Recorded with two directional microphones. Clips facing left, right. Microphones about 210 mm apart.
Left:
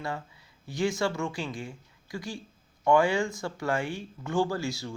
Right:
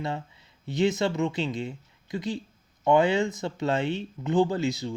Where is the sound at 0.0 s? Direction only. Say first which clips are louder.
Right 3 dB; 25° right (ahead or behind).